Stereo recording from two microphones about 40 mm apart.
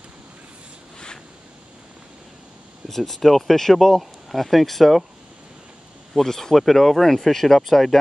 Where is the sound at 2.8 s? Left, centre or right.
Centre.